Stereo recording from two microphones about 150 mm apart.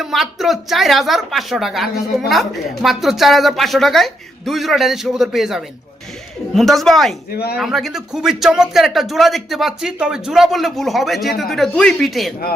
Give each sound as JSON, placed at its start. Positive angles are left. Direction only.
{"t": 0.0, "sound": "speech", "side_deg": 0}
{"t": 7.3, "sound": "speech", "side_deg": 90}
{"t": 7.5, "sound": "speech", "side_deg": 0}